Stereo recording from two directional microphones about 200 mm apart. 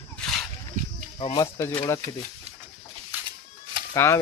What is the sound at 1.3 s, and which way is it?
Speech, 15° left (ahead or behind).